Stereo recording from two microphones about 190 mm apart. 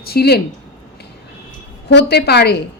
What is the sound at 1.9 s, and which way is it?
Speech, 60° left (ahead or behind).